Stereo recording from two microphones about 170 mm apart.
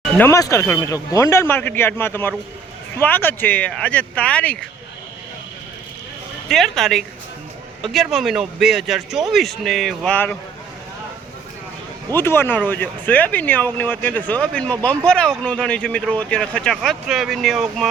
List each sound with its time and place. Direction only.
0.2 s speech: 20° left (ahead or behind)
6.5 s speech: centre (ahead or behind)
12.1 s speech: 15° left (ahead or behind)